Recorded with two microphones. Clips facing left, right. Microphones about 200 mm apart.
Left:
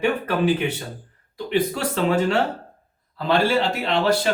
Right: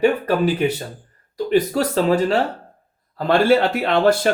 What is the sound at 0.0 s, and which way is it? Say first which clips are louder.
Speech: right 4 dB; 40° right (ahead or behind).